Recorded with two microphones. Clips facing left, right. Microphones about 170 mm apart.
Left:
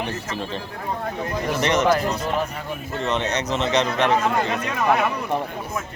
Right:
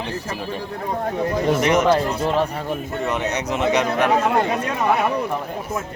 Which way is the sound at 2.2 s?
35° right (ahead or behind).